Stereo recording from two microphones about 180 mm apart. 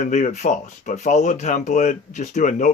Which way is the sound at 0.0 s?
40° left (ahead or behind).